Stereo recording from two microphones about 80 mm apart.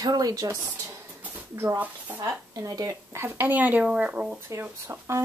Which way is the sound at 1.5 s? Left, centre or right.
Right.